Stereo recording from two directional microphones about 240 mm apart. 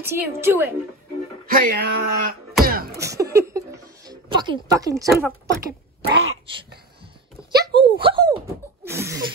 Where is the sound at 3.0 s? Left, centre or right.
Centre.